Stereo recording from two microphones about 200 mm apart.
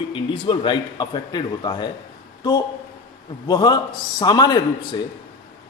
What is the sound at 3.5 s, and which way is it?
Speech, 20° left (ahead or behind).